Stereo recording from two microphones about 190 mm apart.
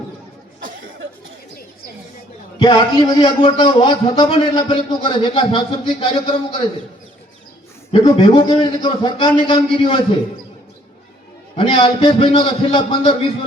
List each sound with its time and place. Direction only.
2.6 s a man's voice: 20° left (ahead or behind)
7.9 s a man's voice: 25° left (ahead or behind)
11.5 s a man's voice: 30° left (ahead or behind)